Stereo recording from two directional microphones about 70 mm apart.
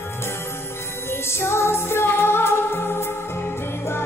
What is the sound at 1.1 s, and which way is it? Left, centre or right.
Music, left.